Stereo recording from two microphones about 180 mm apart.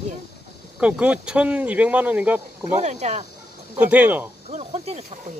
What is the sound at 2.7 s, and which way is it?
Speech, 40° right (ahead or behind).